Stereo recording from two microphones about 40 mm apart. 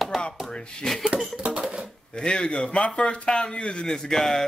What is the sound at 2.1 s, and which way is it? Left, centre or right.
A man's voice, left.